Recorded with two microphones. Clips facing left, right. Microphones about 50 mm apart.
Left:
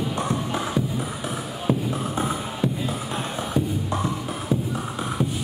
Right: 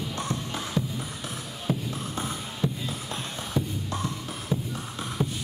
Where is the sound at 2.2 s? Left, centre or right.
Centre.